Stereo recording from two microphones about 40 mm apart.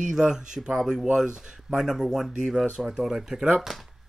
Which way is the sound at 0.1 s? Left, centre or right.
Centre.